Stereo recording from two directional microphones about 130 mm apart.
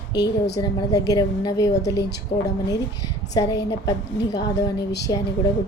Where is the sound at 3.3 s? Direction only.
30° left (ahead or behind).